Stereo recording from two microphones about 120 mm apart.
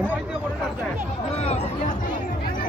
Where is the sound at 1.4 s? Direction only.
65° left (ahead or behind).